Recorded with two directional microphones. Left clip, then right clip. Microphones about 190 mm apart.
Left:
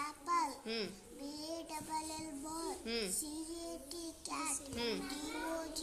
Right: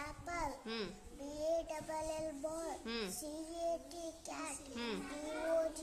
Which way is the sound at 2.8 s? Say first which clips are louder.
Left 2 dB; 10° right (ahead or behind).